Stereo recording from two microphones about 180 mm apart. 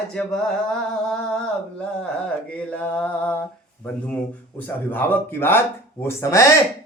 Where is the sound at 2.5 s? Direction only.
10° left (ahead or behind).